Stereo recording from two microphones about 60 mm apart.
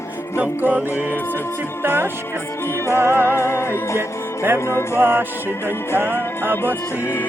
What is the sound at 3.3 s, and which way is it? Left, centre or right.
Music, left.